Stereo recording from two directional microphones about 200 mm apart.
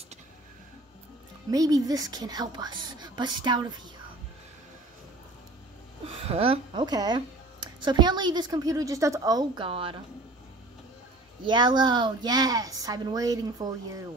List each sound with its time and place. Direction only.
1.5 s speech: 20° right (ahead or behind)
6.0 s speech: 30° right (ahead or behind)
11.4 s speech: 20° right (ahead or behind)